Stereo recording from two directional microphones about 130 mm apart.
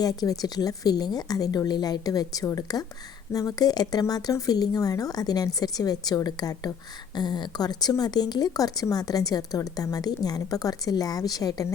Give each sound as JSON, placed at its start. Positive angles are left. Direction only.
{"t": 0.0, "sound": "speech", "side_deg": 30}